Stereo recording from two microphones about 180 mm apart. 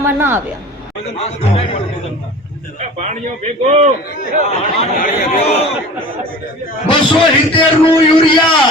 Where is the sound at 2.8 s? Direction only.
40° right (ahead or behind).